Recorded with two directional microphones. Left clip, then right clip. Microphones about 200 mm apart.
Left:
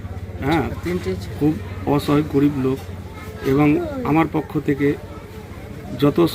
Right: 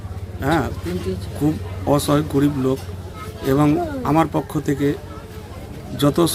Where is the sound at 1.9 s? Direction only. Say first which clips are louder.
Right 1 dB; 15° right (ahead or behind).